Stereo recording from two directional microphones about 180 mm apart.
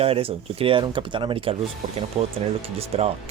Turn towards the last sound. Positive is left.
turn(degrees=-35)  # may be behind; listen again after turning